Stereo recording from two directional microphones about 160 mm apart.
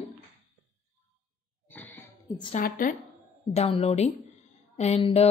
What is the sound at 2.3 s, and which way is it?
Speech, 30° left (ahead or behind).